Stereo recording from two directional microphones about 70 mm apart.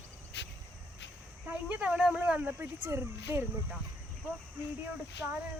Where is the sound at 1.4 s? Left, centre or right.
Right.